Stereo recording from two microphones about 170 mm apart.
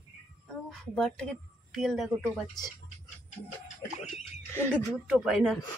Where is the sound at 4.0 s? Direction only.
40° left (ahead or behind).